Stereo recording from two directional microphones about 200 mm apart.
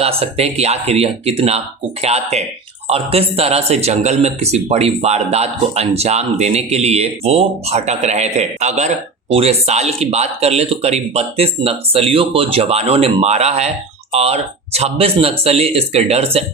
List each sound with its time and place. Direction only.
0.0 s speech: 30° right (ahead or behind)